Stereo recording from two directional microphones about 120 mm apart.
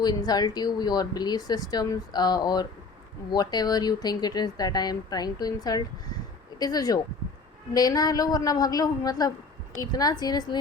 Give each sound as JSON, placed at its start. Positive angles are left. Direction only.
{"t": 0.0, "sound": "speech", "side_deg": 35}